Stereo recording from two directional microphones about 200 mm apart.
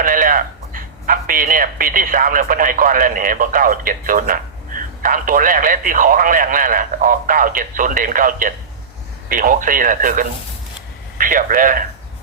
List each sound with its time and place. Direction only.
0.0 s speech: 45° right (ahead or behind)